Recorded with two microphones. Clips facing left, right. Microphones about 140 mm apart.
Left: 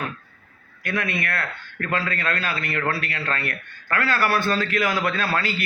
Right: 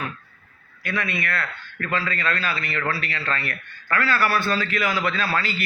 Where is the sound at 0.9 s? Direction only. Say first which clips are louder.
Left 1 dB; 55° left (ahead or behind).